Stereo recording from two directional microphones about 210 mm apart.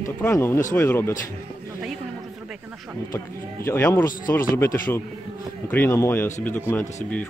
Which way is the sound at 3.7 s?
15° left (ahead or behind).